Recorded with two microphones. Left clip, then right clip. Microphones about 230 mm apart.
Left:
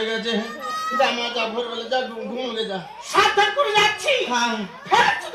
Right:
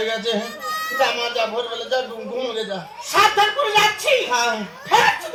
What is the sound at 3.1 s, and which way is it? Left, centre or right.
Speech, right.